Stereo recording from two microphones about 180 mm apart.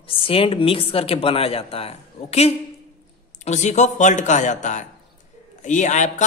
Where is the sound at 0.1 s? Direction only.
30° left (ahead or behind).